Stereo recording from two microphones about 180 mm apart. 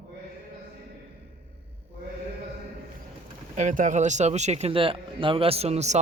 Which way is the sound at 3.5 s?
45° right (ahead or behind).